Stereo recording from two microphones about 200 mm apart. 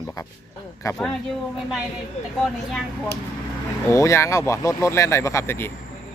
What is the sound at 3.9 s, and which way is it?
Speech, 15° left (ahead or behind).